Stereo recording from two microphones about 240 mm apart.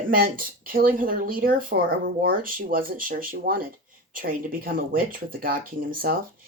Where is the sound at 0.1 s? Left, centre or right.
Right.